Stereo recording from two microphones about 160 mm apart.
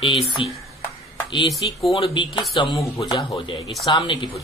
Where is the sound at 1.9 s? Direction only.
35° left (ahead or behind).